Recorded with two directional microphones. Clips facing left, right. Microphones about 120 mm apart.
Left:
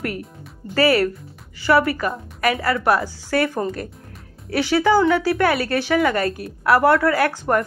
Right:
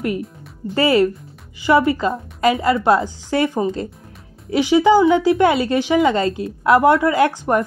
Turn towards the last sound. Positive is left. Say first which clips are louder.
# right 3 dB
turn(degrees=-20)  # may be behind; listen again after turning